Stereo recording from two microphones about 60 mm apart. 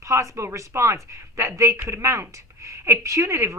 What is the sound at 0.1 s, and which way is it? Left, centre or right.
A woman's voice, right.